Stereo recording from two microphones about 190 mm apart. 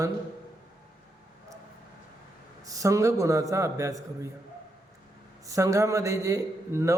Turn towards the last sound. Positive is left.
turn(degrees=-15)  # may be behind; listen again after turning